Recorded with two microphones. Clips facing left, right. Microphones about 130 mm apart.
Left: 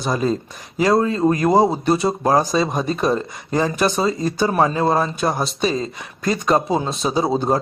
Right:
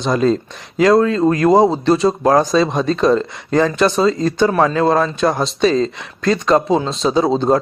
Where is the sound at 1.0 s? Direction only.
25° left (ahead or behind).